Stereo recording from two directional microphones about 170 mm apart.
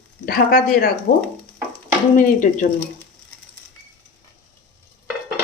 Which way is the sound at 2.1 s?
50° left (ahead or behind).